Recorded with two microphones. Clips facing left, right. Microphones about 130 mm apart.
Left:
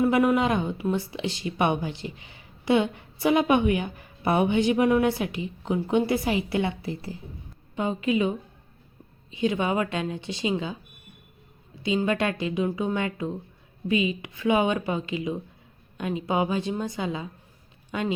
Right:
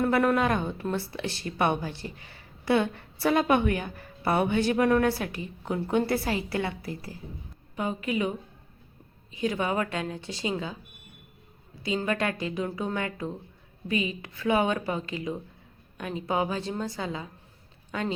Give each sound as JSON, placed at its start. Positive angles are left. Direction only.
{"t": 0.0, "sound": "speech", "side_deg": 10}
{"t": 11.8, "sound": "speech", "side_deg": 20}